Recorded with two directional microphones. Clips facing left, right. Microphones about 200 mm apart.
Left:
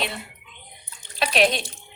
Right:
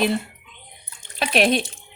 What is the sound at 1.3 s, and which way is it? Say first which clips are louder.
Speech: right 2 dB; 55° right (ahead or behind).